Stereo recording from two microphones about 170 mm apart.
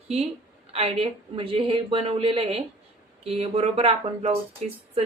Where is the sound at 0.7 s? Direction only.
40° right (ahead or behind).